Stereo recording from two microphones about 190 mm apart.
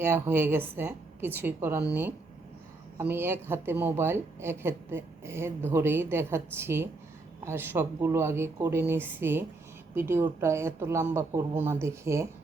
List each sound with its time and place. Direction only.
0.0 s a woman's voice: 10° right (ahead or behind)